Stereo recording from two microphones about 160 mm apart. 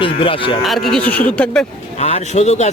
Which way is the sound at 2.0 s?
40° left (ahead or behind).